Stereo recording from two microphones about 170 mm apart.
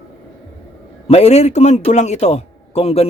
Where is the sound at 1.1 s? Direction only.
40° left (ahead or behind).